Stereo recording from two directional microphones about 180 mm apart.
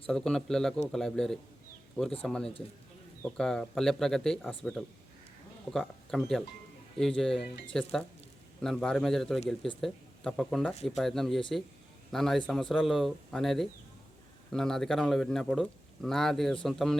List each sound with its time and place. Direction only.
0.1 s speech: 5° left (ahead or behind)